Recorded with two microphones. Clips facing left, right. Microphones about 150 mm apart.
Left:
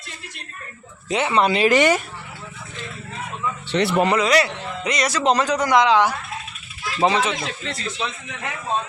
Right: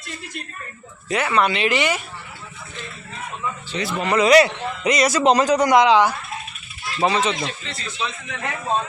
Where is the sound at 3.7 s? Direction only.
70° left (ahead or behind).